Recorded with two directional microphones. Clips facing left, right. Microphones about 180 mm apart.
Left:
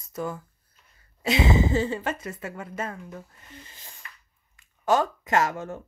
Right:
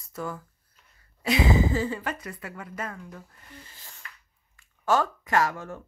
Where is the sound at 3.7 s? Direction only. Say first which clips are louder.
Left 2 dB; 20° left (ahead or behind).